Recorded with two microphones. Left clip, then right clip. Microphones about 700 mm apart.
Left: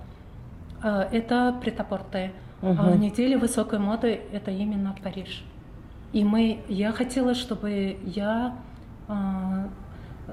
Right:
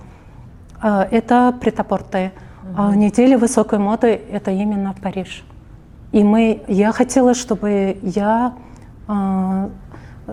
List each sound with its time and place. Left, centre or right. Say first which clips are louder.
0.8 s a woman's voice: right 10 dB; right